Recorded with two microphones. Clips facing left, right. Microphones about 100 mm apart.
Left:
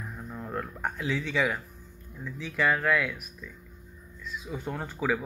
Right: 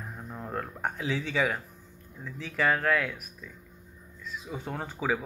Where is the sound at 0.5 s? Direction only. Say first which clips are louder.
Even; 25° right (ahead or behind).